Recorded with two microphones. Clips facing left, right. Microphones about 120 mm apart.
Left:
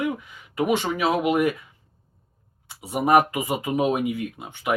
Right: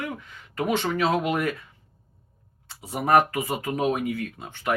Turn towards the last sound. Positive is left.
turn(degrees=15)  # may be behind; listen again after turning